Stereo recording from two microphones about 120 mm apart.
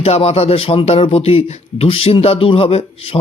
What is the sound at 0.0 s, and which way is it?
Speech, 55° left (ahead or behind).